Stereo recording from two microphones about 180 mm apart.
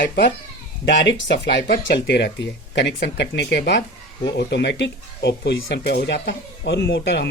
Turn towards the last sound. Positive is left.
turn(degrees=75)  # may be behind; listen again after turning